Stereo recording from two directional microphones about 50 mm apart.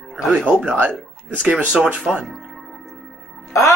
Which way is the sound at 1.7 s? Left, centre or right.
Centre.